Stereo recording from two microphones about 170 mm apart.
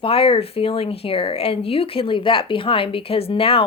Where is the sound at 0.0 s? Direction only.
35° left (ahead or behind).